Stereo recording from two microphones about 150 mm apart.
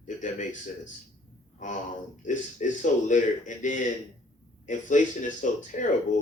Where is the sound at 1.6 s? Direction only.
60° left (ahead or behind).